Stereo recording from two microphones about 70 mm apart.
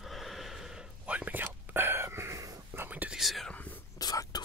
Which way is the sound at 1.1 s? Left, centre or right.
Right.